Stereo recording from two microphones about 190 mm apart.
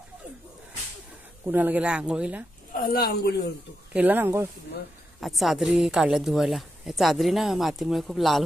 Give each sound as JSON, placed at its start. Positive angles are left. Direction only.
{"t": 1.4, "sound": "speech", "side_deg": -10}
{"t": 2.7, "sound": "speech", "side_deg": 50}
{"t": 3.9, "sound": "speech", "side_deg": -10}
{"t": 5.2, "sound": "a woman's voice", "side_deg": 0}